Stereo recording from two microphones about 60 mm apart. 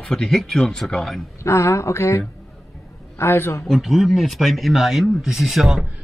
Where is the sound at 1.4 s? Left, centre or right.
Left.